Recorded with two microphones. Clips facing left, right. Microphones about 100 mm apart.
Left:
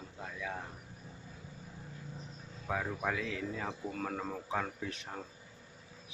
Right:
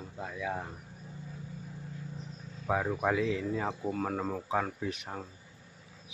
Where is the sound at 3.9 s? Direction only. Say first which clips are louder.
Right 5 dB; 10° right (ahead or behind).